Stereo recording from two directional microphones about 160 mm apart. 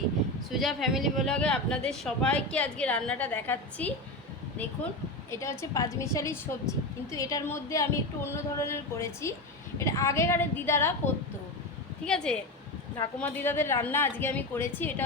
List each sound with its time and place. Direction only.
0.5 s speech: centre (ahead or behind)
5.3 s speech: 15° left (ahead or behind)
12.0 s a woman's voice: 5° left (ahead or behind)